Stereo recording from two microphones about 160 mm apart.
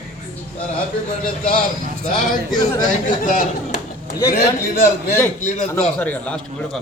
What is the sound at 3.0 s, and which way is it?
Speech, 55° left (ahead or behind).